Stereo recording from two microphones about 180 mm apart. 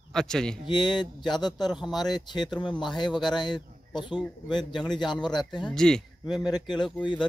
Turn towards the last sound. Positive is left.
turn(degrees=25)  # may be behind; listen again after turning